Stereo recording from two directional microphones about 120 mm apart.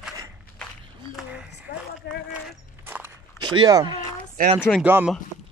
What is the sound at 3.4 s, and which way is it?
Speech, 40° right (ahead or behind).